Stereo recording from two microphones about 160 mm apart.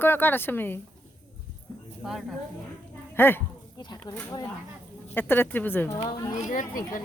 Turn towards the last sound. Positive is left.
turn(degrees=55)  # may be behind; listen again after turning